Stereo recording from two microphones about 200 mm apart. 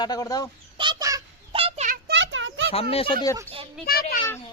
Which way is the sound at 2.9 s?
25° left (ahead or behind).